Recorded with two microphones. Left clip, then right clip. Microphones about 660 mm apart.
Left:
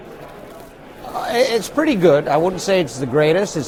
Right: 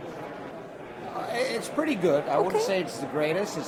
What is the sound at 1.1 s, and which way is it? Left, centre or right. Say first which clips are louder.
Speech: left 12 dB; left.